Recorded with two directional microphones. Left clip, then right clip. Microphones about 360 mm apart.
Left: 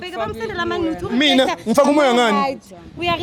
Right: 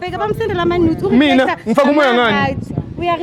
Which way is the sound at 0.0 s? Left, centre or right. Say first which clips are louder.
Right 6 dB; centre.